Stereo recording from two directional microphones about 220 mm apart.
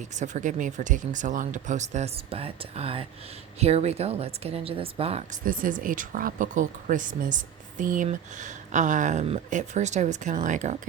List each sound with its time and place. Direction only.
0.1 s speech: 35° right (ahead or behind)